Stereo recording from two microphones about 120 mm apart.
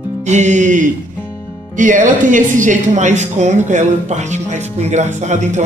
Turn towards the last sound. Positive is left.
turn(degrees=-75)  # may be behind; listen again after turning